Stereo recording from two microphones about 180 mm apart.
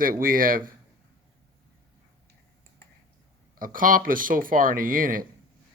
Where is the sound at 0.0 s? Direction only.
50° right (ahead or behind).